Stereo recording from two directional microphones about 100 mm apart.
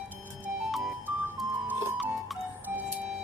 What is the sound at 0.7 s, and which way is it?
Music, centre (ahead or behind).